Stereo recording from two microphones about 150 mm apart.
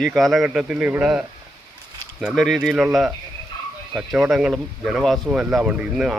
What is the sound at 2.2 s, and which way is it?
Speech, centre (ahead or behind).